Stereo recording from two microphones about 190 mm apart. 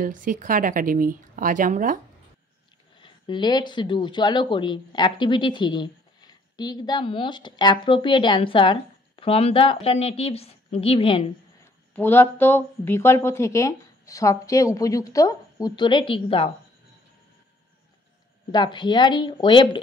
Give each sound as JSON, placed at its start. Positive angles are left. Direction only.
{"t": 0.0, "sound": "a woman's voice", "side_deg": -45}
{"t": 3.0, "sound": "speech", "side_deg": 25}
{"t": 11.9, "sound": "a woman's voice", "side_deg": 10}
{"t": 18.5, "sound": "speech", "side_deg": 25}